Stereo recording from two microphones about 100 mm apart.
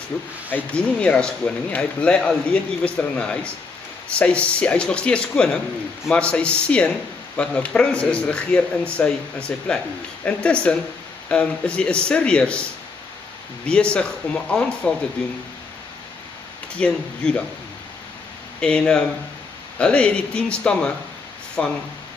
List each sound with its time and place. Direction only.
0.1 s a man's voice: 20° left (ahead or behind)
13.7 s a man's voice: 10° left (ahead or behind)
16.7 s a man's voice: 10° left (ahead or behind)
18.6 s a man's voice: 10° left (ahead or behind)